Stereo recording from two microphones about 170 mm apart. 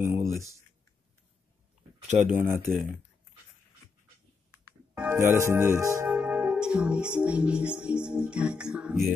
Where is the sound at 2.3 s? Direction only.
15° right (ahead or behind).